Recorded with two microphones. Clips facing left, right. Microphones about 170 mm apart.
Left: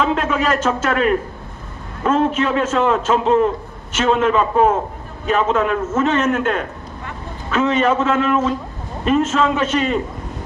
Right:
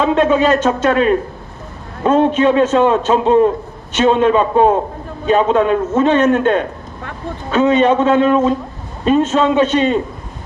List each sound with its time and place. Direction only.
0.0 s a man's voice: 25° right (ahead or behind)